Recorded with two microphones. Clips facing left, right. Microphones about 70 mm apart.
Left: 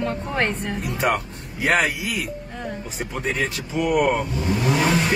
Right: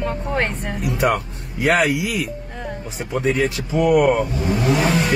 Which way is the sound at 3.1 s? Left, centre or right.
Centre.